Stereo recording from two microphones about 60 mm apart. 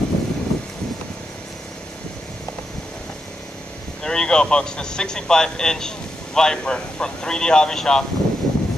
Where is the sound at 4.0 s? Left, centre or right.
Centre.